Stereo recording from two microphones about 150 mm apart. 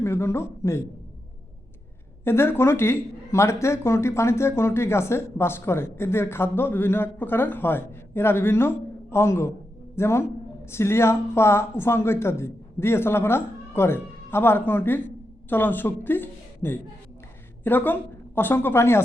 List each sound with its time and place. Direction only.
0.0 s speech: 15° left (ahead or behind)
2.2 s a woman's voice: 15° left (ahead or behind)